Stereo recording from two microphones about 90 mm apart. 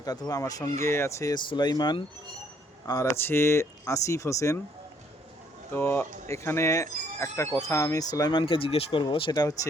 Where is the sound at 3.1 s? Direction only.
25° left (ahead or behind).